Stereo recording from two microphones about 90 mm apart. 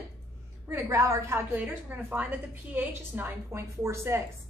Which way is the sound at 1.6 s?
15° right (ahead or behind).